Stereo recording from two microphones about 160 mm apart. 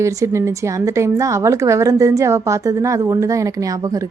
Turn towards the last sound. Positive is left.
turn(degrees=-20)  # may be behind; listen again after turning